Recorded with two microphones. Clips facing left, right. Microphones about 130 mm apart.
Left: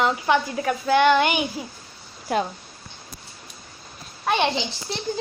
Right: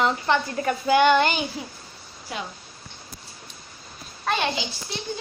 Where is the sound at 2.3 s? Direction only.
50° left (ahead or behind).